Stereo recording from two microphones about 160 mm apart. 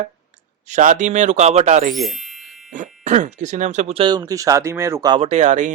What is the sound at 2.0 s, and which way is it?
Music, centre (ahead or behind).